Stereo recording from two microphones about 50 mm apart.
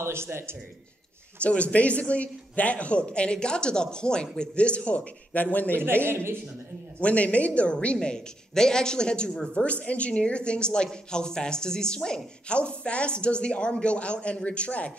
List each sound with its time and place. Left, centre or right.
0.0 s a man's voice: right
1.4 s speech: left
6.0 s a man's voice: right
7.0 s speech: left